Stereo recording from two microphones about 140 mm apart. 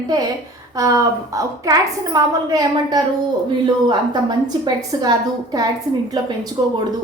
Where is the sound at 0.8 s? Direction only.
25° right (ahead or behind).